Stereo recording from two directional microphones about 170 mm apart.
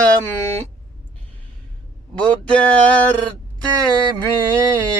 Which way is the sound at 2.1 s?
5° left (ahead or behind).